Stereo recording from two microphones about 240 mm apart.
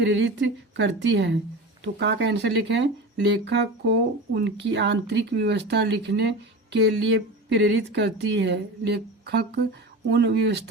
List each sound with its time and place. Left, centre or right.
0.0 s speech: right
7.5 s speech: right